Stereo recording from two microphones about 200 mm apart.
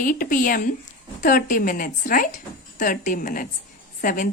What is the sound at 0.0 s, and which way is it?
A woman's voice, 45° left (ahead or behind).